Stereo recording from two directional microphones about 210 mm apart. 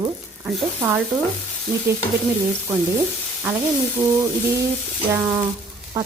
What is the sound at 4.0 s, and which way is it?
Speech, 30° right (ahead or behind).